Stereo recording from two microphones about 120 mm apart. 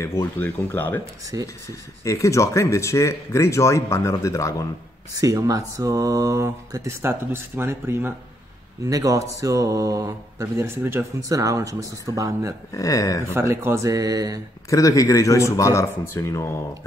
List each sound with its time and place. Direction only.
0.0 s speech: 20° left (ahead or behind)
1.3 s speech: 30° right (ahead or behind)
2.0 s speech: 25° left (ahead or behind)
5.1 s speech: 30° right (ahead or behind)
12.7 s speech: 30° left (ahead or behind)
13.3 s speech: 20° right (ahead or behind)
14.7 s speech: 25° left (ahead or behind)